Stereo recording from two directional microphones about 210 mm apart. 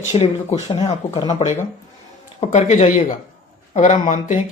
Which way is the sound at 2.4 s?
30° left (ahead or behind).